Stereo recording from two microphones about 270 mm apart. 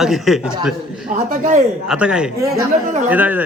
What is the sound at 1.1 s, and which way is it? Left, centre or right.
Speech, right.